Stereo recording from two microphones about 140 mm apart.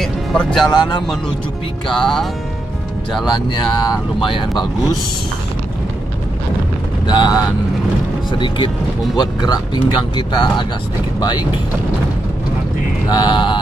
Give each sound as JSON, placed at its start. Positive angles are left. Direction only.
{"t": 0.0, "sound": "music", "side_deg": 0}
{"t": 0.7, "sound": "speech", "side_deg": 30}
{"t": 1.9, "sound": "speech", "side_deg": 5}
{"t": 3.3, "sound": "speech", "side_deg": 35}
{"t": 7.1, "sound": "speech", "side_deg": 30}
{"t": 13.1, "sound": "speech", "side_deg": 35}